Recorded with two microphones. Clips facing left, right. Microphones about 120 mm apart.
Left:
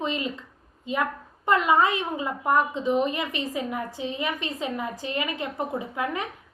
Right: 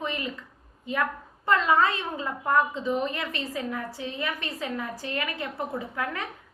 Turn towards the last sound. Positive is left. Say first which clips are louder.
# left 3 dB
turn(degrees=20)  # may be behind; listen again after turning